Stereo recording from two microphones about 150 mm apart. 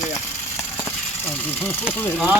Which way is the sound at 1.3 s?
15° left (ahead or behind).